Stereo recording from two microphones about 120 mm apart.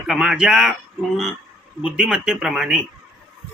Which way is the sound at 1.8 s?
10° right (ahead or behind).